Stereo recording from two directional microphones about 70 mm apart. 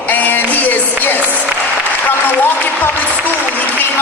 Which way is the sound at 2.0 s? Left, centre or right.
Left.